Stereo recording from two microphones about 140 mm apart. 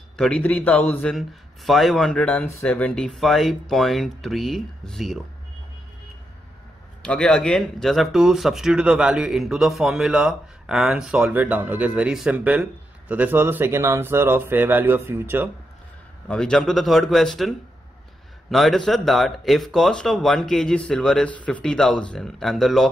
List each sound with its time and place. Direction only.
0.2 s a man's voice: 10° left (ahead or behind)
1.1 s speech: centre (ahead or behind)
7.0 s speech: 5° left (ahead or behind); by 15.5 s 15° right (ahead or behind)
16.3 s speech: 5° left (ahead or behind)